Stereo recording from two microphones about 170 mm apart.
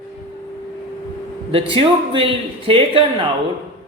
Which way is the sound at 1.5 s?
35° right (ahead or behind).